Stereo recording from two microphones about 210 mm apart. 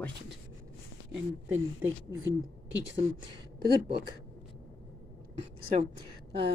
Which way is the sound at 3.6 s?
50° right (ahead or behind).